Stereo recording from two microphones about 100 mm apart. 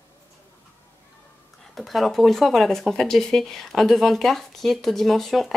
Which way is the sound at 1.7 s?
Centre (ahead or behind).